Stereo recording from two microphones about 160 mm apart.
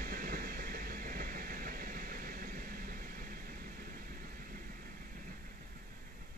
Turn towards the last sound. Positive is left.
turn(degrees=-60)  # may be behind; listen again after turning